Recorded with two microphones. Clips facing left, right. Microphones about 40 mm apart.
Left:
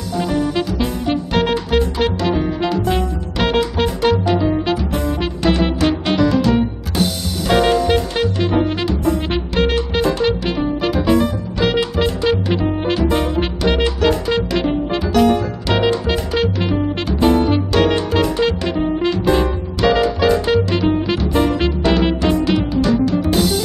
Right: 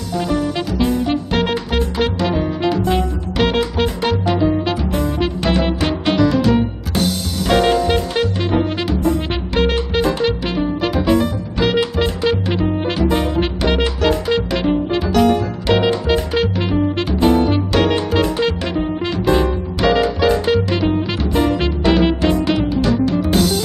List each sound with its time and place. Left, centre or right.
0.1 s music: centre